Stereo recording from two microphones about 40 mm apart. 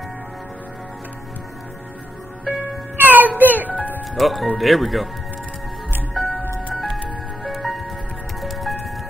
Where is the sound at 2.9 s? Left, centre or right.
Right.